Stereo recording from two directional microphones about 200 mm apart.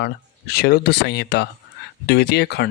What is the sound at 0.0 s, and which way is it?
Speech, 55° left (ahead or behind).